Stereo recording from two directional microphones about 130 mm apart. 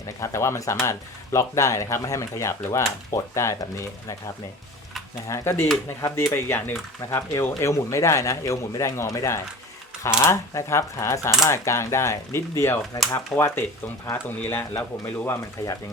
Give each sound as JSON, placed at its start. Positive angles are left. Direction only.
{"t": 0.2, "sound": "speech", "side_deg": 20}
{"t": 5.3, "sound": "speech", "side_deg": 20}